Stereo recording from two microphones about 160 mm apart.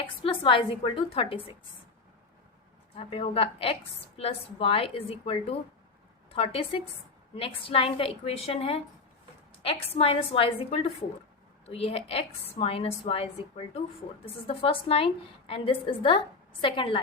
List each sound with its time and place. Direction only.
0.0 s a woman's voice: 35° left (ahead or behind)
2.9 s a woman's voice: 35° left (ahead or behind)